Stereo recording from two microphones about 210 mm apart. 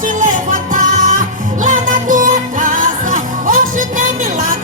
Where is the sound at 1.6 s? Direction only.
35° right (ahead or behind).